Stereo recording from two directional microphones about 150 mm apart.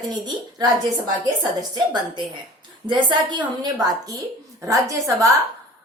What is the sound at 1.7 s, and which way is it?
A woman's voice, 30° right (ahead or behind).